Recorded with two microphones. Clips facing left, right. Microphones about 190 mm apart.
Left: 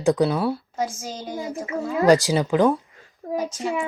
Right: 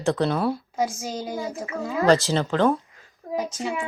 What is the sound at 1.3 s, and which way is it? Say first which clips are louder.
A woman's voice: left 2 dB; 20° left (ahead or behind).